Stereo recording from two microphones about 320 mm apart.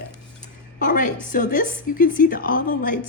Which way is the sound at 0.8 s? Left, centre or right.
Left.